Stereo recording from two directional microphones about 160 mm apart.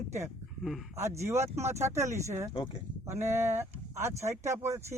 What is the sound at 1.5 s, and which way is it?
Speech, 15° right (ahead or behind).